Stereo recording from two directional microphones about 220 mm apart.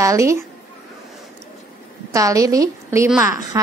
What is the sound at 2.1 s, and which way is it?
Speech, 15° right (ahead or behind).